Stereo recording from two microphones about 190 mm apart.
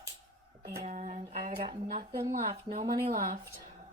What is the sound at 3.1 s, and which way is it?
Speech, 45° right (ahead or behind).